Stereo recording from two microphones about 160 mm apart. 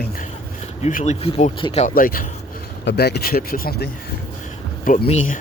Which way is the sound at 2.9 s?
90° left.